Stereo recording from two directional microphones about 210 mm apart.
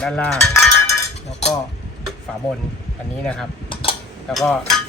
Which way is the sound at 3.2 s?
5° left (ahead or behind).